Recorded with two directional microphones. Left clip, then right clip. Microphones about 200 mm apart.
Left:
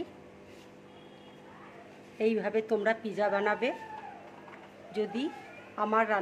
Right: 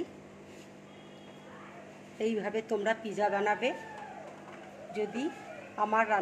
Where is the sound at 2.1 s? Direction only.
40° left (ahead or behind).